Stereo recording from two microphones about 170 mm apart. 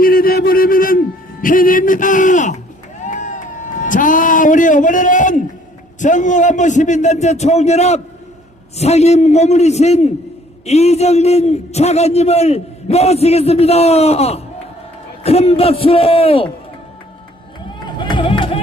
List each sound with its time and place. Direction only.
0.0 s a sound: 60° left (ahead or behind)
1.4 s a man's voice: 55° left (ahead or behind)
3.0 s vehicle: 50° left (ahead or behind)
3.8 s a man's voice: 50° left (ahead or behind); by 16.5 s 35° left (ahead or behind)
17.8 s run: 25° left (ahead or behind)